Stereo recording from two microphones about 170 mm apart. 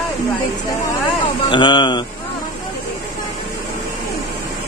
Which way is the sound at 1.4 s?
25° left (ahead or behind).